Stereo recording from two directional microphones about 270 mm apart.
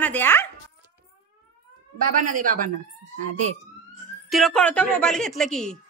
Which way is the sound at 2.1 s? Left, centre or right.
Right.